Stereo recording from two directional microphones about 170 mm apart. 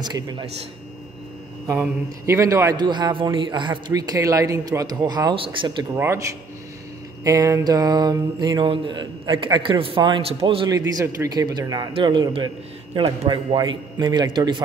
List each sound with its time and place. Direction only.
0.0 s a man's voice: 25° right (ahead or behind)
1.7 s a man's voice: 15° right (ahead or behind)
5.9 s a man's voice: 15° right (ahead or behind)
7.2 s a man's voice: 20° right (ahead or behind)